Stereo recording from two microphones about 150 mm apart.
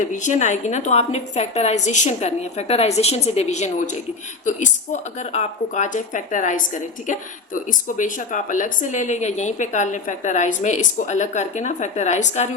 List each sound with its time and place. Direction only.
0.0 s a woman's voice: 55° left (ahead or behind)